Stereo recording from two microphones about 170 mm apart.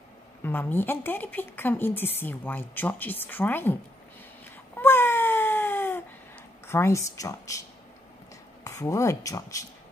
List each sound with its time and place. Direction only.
0.4 s a woman's voice: 10° left (ahead or behind)
4.7 s cat: 15° left (ahead or behind)
6.7 s a woman's voice: 15° left (ahead or behind)
8.6 s speech: 20° left (ahead or behind)